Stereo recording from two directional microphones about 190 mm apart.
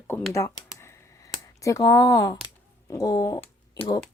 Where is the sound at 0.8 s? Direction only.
15° left (ahead or behind).